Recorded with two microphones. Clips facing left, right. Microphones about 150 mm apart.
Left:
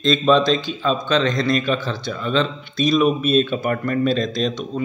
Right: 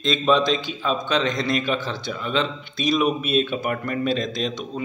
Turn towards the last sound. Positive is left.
turn(degrees=-15)  # may be behind; listen again after turning